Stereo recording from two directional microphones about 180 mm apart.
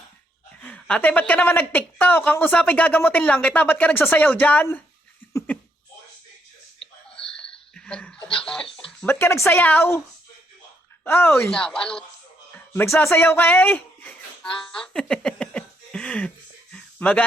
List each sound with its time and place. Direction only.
0.6 s a woman's voice: 5° left (ahead or behind)
5.2 s laughter: 10° left (ahead or behind)
7.2 s a sound: 5° left (ahead or behind)
8.4 s a woman's voice: 5° left (ahead or behind)
11.0 s a woman's voice: 10° left (ahead or behind)
16.7 s a sound: 5° left (ahead or behind)